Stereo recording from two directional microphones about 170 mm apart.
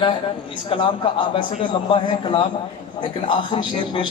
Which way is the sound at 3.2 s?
30° left (ahead or behind).